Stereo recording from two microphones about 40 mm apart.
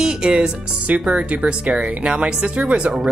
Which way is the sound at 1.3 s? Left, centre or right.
Right.